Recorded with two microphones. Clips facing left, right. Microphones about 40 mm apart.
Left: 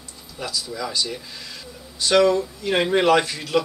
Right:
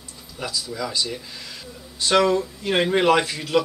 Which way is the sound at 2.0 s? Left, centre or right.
Right.